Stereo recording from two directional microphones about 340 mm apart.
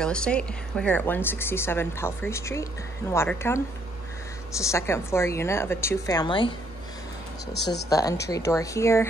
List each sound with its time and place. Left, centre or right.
0.0 s a woman's voice: centre
7.5 s speech: left
7.9 s a woman's voice: centre